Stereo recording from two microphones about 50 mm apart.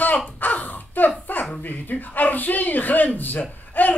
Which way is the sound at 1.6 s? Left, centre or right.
Left.